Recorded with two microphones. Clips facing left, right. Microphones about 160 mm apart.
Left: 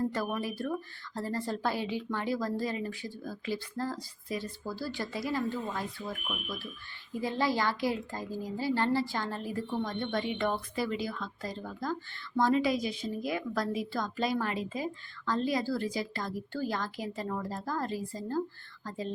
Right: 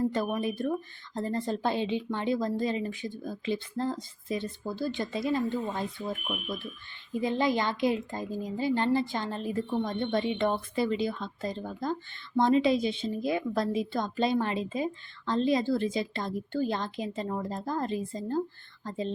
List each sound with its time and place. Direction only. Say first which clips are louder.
0.1 s a woman's voice: right 4 dB; 20° right (ahead or behind)